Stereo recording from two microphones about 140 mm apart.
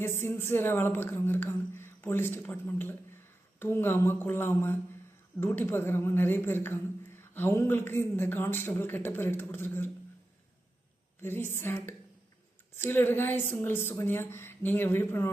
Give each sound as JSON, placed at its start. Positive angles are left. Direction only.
{"t": 0.0, "sound": "speech", "side_deg": 15}
{"t": 11.2, "sound": "speech", "side_deg": 15}